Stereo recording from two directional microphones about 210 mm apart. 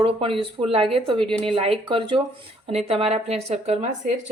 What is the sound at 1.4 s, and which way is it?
Speech, 25° right (ahead or behind).